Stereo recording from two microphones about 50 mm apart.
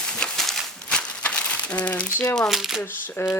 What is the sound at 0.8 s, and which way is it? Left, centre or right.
Crumpling, left.